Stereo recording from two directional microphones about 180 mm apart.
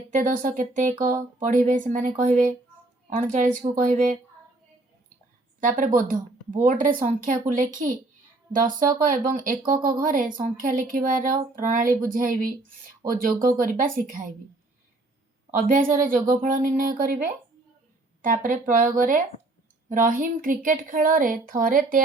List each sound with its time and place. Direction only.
0.1 s speech: 50° right (ahead or behind)
3.6 s speech: 45° right (ahead or behind)
5.5 s a woman's voice: 45° right (ahead or behind)
15.5 s speech: 50° right (ahead or behind)
18.2 s speech: 45° right (ahead or behind)